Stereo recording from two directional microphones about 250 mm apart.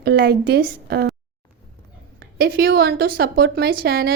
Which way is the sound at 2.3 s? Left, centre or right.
Right.